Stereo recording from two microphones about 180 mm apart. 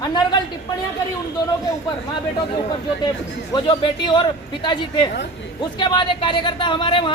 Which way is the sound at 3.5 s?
25° left (ahead or behind).